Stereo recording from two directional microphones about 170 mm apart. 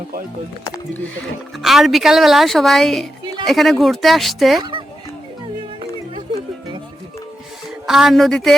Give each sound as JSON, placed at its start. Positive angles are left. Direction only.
{"t": 1.6, "sound": "a woman's voice", "side_deg": 0}
{"t": 7.9, "sound": "a woman's voice", "side_deg": 0}